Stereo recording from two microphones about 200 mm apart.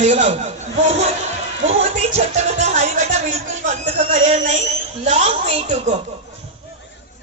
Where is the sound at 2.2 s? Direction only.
35° right (ahead or behind).